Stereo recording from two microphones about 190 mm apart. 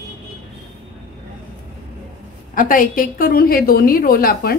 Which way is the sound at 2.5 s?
45° left (ahead or behind).